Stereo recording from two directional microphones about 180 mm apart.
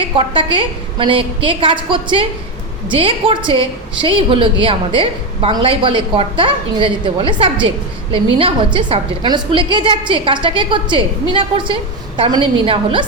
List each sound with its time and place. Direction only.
0.0 s a woman's voice: 30° right (ahead or behind)